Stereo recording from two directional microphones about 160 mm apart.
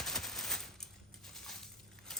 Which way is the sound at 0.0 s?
Centre (ahead or behind).